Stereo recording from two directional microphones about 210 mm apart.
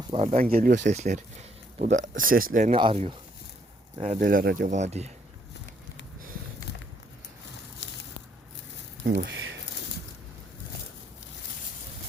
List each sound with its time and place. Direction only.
0.1 s speech: 30° right (ahead or behind)
2.7 s speech: 25° right (ahead or behind)
4.0 s speech: 40° right (ahead or behind)
7.8 s a sound: 60° left (ahead or behind)
9.0 s speech: 55° right (ahead or behind)